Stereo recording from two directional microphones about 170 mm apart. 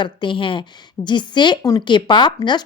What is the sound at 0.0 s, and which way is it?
A woman's voice, 30° left (ahead or behind).